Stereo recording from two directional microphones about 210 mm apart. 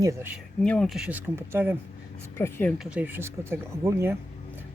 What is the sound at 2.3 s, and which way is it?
Speech, 10° left (ahead or behind).